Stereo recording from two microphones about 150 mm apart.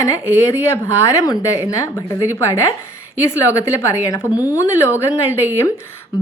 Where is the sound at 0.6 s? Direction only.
15° left (ahead or behind).